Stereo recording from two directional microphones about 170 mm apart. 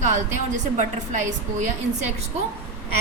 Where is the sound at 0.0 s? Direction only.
45° right (ahead or behind).